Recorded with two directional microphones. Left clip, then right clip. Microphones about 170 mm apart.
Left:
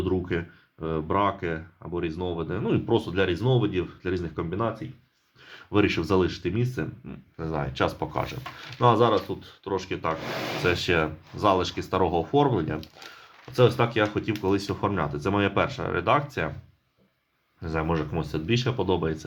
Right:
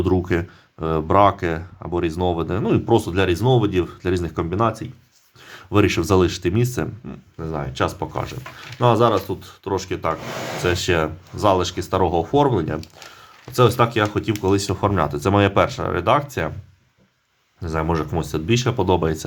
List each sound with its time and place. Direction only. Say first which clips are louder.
0.0 s speech: right 7 dB; 45° right (ahead or behind)
5.5 s speech: right 5 dB; 30° right (ahead or behind)
7.3 s speech: right 3 dB; 5° right (ahead or behind)
17.6 s speech: right 5 dB; 25° right (ahead or behind)